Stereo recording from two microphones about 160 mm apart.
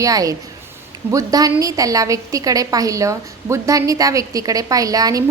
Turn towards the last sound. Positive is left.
turn(degrees=-20)  # may be behind; listen again after turning